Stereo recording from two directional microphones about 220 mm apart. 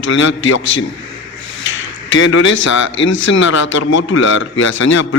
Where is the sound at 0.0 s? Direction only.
60° left (ahead or behind).